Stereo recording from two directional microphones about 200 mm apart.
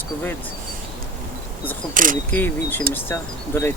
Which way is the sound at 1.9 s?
40° right (ahead or behind).